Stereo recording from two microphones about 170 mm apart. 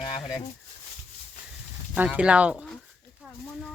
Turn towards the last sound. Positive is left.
turn(degrees=-5)  # may be behind; listen again after turning